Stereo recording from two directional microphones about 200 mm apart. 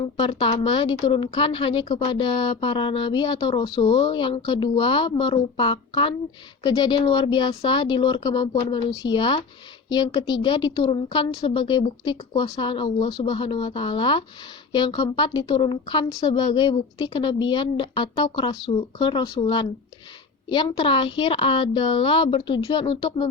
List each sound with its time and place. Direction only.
0.0 s a woman's voice: 25° left (ahead or behind)